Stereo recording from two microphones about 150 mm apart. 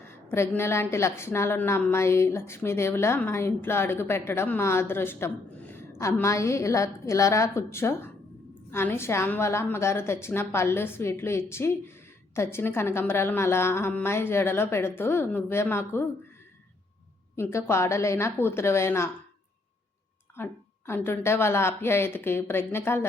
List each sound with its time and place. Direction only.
0.3 s a woman's voice: 15° left (ahead or behind)
17.3 s a woman's voice: 15° left (ahead or behind)
20.3 s a woman's voice: 15° left (ahead or behind)